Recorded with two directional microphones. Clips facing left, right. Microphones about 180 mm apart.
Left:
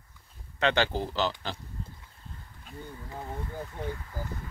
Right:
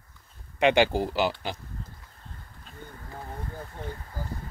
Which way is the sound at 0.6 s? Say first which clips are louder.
Right 5 dB; 10° right (ahead or behind).